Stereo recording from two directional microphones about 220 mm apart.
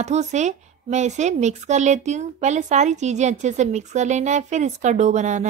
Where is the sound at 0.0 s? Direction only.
30° right (ahead or behind).